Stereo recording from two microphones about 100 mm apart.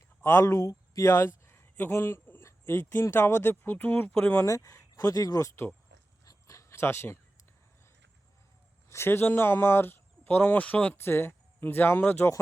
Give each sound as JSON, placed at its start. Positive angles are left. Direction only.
{"t": 0.2, "sound": "speech", "side_deg": 25}
{"t": 4.4, "sound": "speech", "side_deg": 35}
{"t": 6.2, "sound": "a sound", "side_deg": 30}
{"t": 8.9, "sound": "speech", "side_deg": 25}